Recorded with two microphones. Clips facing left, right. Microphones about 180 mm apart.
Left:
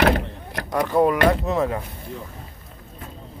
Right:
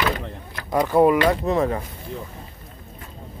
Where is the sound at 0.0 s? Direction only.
65° left (ahead or behind).